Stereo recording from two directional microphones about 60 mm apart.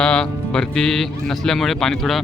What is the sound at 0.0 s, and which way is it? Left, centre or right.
Speech, centre.